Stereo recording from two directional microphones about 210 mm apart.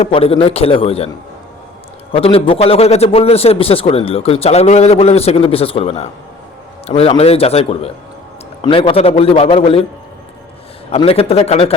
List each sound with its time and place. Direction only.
0.0 s a man's voice: 25° left (ahead or behind)
2.1 s a man's voice: 25° left (ahead or behind)
10.9 s a man's voice: 30° left (ahead or behind)